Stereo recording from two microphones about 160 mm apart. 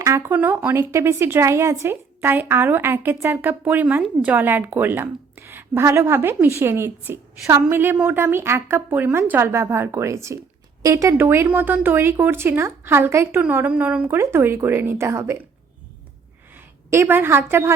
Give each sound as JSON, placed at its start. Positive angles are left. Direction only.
{"t": 0.0, "sound": "speech", "side_deg": -15}
{"t": 16.6, "sound": "a woman's voice", "side_deg": -15}